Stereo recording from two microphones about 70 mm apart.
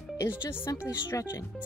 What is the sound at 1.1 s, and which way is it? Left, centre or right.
Speech, left.